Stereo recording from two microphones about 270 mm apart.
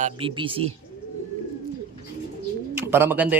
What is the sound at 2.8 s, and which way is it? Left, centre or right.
Speech, centre.